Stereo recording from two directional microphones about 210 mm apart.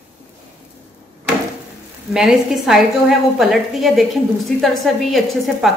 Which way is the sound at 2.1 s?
Centre (ahead or behind).